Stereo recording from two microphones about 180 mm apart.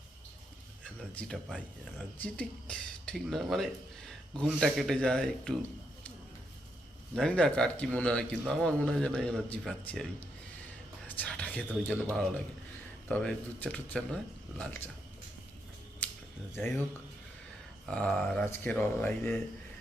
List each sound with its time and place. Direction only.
1.1 s a man's voice: 5° left (ahead or behind)
7.2 s a man's voice: 5° left (ahead or behind)
16.6 s speech: 10° left (ahead or behind)
17.8 s a man's voice: 5° left (ahead or behind)